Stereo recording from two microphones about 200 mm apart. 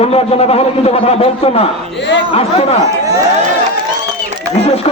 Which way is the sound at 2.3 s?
30° left (ahead or behind).